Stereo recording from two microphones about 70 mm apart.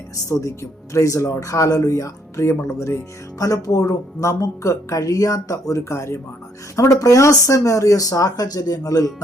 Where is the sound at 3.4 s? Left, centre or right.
Left.